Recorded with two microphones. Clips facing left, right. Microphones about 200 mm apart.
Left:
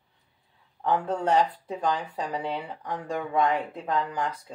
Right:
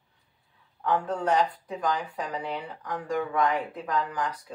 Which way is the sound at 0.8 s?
25° left (ahead or behind).